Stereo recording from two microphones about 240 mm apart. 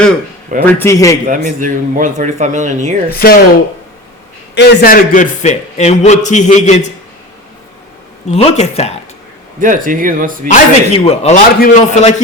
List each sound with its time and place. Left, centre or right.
0.6 s a man's voice: centre
1.5 s speech: right
3.1 s a man's voice: left
8.3 s a man's voice: left
9.6 s speech: right
10.5 s a man's voice: left